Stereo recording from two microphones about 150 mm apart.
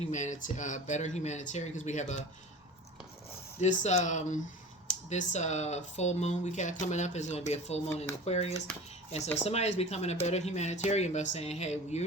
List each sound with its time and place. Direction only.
0.1 s speech: 55° left (ahead or behind)
3.6 s speech: 50° left (ahead or behind)